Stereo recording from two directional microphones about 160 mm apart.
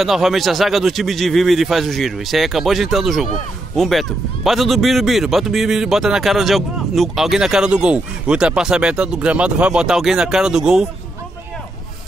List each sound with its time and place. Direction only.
0.0 s speech: centre (ahead or behind)